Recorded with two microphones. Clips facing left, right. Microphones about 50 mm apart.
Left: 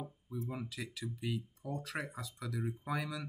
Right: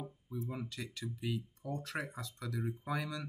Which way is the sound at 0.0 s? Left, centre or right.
Centre.